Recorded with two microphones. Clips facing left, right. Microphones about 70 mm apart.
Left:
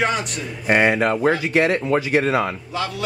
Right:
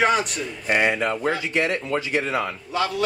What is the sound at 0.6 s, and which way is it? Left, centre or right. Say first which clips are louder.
Speech: left 4 dB; left.